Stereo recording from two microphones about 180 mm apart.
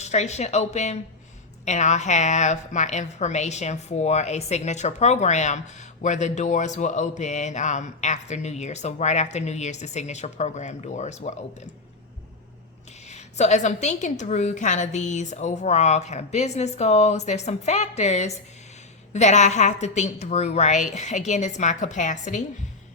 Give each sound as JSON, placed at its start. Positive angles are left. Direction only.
{"t": 0.0, "sound": "a woman's voice", "side_deg": 40}
{"t": 13.1, "sound": "a woman's voice", "side_deg": 40}